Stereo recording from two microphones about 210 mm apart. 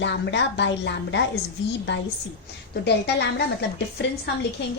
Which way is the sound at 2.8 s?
50° left (ahead or behind).